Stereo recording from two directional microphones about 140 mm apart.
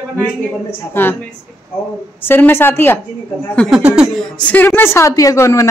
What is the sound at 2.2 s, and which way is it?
Speech, 15° left (ahead or behind).